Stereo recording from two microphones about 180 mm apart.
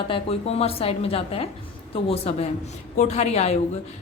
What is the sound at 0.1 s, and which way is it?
A woman's voice, 35° left (ahead or behind).